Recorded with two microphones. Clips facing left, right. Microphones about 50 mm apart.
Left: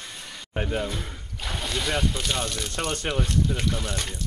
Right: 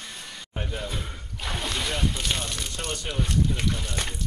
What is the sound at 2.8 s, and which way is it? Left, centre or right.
Speech, left.